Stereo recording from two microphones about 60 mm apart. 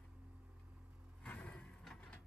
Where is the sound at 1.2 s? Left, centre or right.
Left.